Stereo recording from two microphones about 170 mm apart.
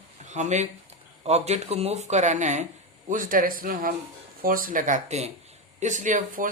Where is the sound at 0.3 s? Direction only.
45° right (ahead or behind).